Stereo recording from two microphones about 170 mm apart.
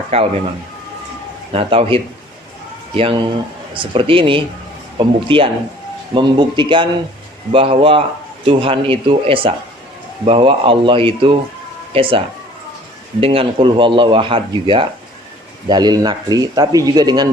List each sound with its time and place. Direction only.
0.1 s speech: 35° right (ahead or behind)
1.5 s speech: 35° right (ahead or behind)